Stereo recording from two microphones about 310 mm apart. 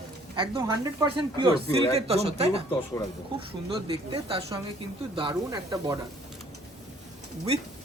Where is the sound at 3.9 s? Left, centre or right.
Centre.